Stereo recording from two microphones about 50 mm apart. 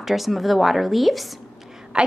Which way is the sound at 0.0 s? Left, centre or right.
Centre.